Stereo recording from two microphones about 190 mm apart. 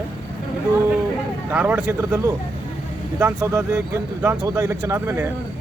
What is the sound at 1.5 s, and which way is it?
Speech, 10° right (ahead or behind).